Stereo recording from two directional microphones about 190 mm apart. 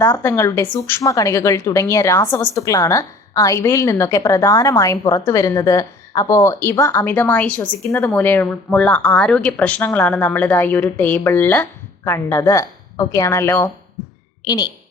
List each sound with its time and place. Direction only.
0.0 s a woman's voice: 15° left (ahead or behind)